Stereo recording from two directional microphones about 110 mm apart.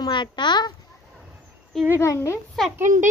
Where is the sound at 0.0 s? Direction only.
45° left (ahead or behind).